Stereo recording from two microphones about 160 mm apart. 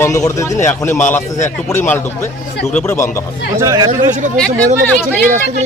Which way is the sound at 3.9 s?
50° right (ahead or behind).